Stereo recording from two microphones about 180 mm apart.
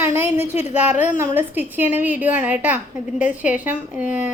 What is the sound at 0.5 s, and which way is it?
Speech, 40° left (ahead or behind).